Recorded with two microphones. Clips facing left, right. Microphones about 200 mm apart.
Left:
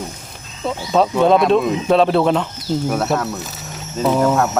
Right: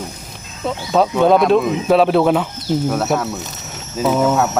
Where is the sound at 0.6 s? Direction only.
Centre (ahead or behind).